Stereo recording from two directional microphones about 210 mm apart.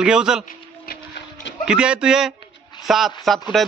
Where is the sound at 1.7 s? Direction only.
5° right (ahead or behind).